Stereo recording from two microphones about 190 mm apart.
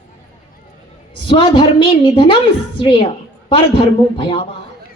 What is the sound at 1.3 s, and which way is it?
A woman's voice, 25° left (ahead or behind).